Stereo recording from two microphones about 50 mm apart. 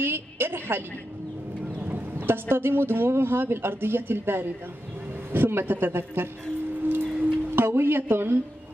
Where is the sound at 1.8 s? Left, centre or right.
Right.